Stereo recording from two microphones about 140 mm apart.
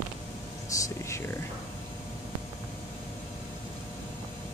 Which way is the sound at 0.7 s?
25° left (ahead or behind).